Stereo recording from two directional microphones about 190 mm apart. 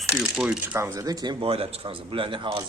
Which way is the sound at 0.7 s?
15° right (ahead or behind).